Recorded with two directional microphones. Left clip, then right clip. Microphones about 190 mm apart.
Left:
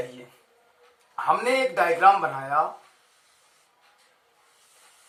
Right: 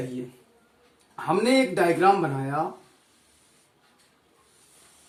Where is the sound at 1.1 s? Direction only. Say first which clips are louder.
Even; 5° left (ahead or behind).